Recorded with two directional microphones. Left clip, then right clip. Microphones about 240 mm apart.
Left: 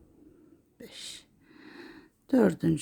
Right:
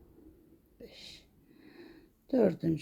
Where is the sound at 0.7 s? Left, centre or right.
Left.